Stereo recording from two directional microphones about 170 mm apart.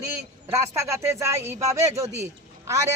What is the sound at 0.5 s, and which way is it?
A woman's voice, 15° right (ahead or behind).